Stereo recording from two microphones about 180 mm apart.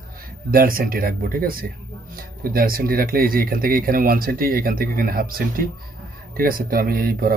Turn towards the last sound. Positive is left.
turn(degrees=-55)  # may be behind; listen again after turning